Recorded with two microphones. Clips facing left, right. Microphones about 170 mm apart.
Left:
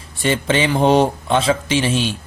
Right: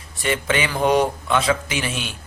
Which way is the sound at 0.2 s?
30° left (ahead or behind).